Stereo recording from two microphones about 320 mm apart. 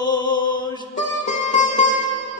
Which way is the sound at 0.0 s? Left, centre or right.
Centre.